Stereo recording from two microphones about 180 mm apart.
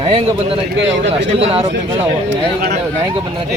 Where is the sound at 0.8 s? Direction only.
85° right.